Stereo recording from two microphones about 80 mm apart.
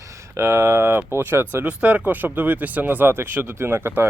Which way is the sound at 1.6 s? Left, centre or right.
Centre.